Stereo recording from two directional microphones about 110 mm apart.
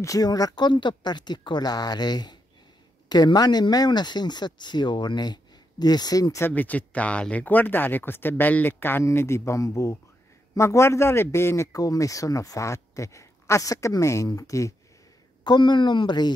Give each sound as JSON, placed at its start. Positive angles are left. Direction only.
{"t": 0.0, "sound": "speech", "side_deg": 35}
{"t": 6.4, "sound": "a man's voice", "side_deg": 15}
{"t": 15.4, "sound": "speech", "side_deg": 45}